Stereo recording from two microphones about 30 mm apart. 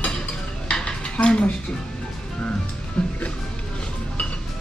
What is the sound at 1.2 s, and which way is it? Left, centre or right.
Speech, left.